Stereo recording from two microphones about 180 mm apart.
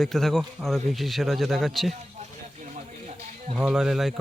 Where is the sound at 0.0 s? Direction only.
Centre (ahead or behind).